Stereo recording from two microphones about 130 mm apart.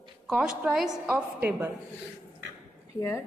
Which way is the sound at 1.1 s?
15° right (ahead or behind).